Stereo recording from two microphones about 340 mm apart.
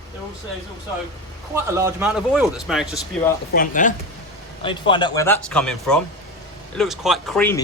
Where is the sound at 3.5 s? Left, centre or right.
Left.